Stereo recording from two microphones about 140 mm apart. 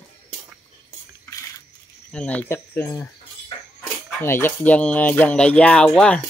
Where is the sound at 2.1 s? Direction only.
10° left (ahead or behind).